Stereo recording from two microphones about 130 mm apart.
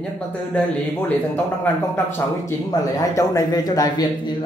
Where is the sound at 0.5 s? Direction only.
10° left (ahead or behind).